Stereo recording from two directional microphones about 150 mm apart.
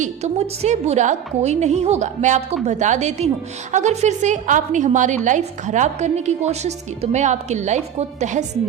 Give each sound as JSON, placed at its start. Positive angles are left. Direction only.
{"t": 0.0, "sound": "a woman's voice", "side_deg": -45}